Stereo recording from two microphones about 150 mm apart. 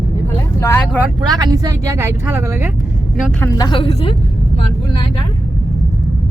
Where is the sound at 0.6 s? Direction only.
20° left (ahead or behind).